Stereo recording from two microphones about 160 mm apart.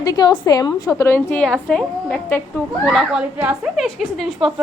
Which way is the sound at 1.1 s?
10° left (ahead or behind).